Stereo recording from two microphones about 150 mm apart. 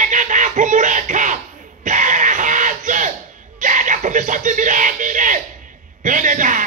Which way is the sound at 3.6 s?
60° right (ahead or behind).